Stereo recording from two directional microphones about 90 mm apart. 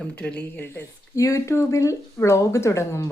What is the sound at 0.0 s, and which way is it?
Speech, 15° left (ahead or behind).